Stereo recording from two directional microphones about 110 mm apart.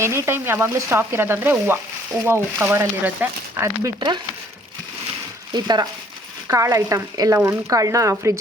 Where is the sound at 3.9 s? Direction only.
45° right (ahead or behind).